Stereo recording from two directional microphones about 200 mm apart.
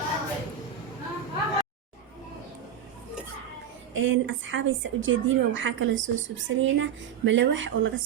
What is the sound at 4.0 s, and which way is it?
A woman's voice, 70° right (ahead or behind).